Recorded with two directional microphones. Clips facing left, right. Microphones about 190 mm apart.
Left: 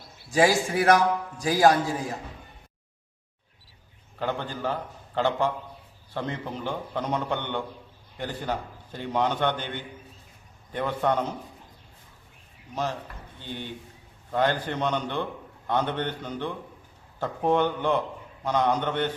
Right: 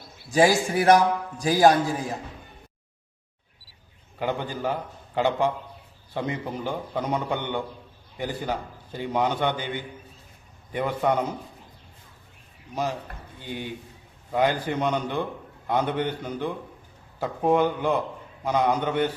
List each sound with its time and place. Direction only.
0.3 s a man's voice: 20° right (ahead or behind)
4.2 s a man's voice: 15° right (ahead or behind)
12.7 s a man's voice: 10° right (ahead or behind)